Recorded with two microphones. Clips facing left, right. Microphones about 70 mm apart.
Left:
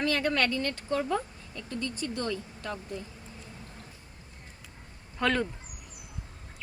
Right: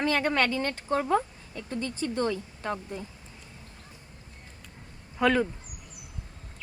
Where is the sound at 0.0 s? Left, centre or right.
Right.